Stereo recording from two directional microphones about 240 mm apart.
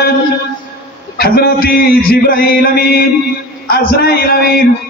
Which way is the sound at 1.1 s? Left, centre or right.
Left.